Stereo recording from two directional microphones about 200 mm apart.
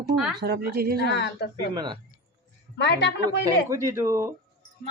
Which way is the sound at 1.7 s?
20° right (ahead or behind).